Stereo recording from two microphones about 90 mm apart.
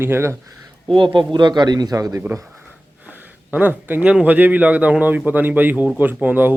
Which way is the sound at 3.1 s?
15° right (ahead or behind).